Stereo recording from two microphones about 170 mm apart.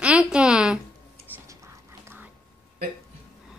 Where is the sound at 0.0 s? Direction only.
5° right (ahead or behind).